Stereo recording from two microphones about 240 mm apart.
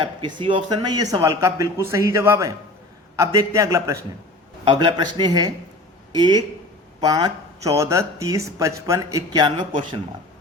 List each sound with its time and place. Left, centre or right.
0.0 s speech: centre